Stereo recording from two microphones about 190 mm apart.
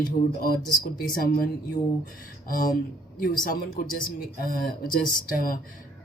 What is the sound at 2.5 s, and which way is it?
Speech, 50° left (ahead or behind).